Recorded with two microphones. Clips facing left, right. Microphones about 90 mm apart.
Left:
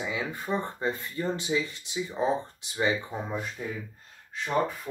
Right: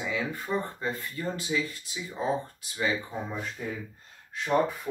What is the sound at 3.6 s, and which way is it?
Speech, 10° left (ahead or behind).